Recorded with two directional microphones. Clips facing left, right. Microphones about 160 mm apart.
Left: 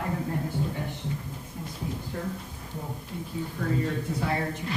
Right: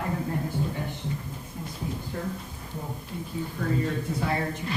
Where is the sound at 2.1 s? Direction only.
5° right (ahead or behind).